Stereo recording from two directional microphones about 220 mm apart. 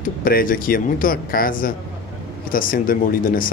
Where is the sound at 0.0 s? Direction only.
40° left (ahead or behind).